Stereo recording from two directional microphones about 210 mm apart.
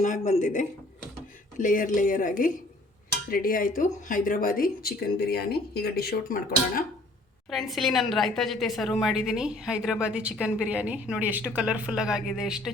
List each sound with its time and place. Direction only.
0.0 s speech: 35° left (ahead or behind)
7.5 s a woman's voice: centre (ahead or behind)